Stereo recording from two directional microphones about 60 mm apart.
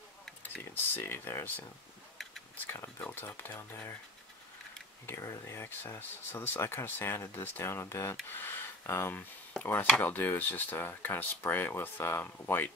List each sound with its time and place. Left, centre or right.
0.9 s speech: left
2.6 s speech: left
5.0 s speech: left
8.3 s speech: left
9.5 s speech: left